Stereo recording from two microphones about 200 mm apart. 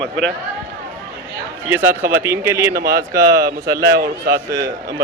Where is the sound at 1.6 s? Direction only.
10° right (ahead or behind).